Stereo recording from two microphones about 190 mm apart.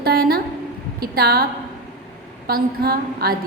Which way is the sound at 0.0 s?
55° right (ahead or behind).